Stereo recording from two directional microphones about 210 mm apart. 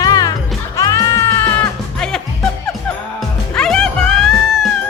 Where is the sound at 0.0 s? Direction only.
15° left (ahead or behind).